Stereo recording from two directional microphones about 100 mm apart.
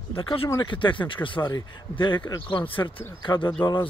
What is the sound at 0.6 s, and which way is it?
Speech, 55° left (ahead or behind).